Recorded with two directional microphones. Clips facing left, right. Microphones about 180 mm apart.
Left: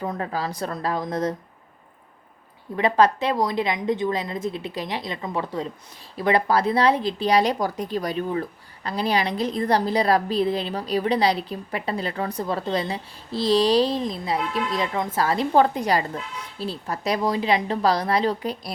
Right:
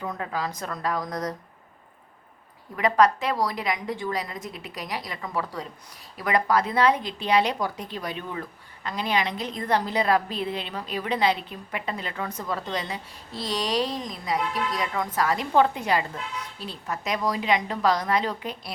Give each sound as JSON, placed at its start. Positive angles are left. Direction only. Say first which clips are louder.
{"t": 0.0, "sound": "a woman's voice", "louder": "left 3 dB", "side_deg": 35}
{"t": 2.7, "sound": "a woman's voice", "louder": "left 2 dB", "side_deg": 30}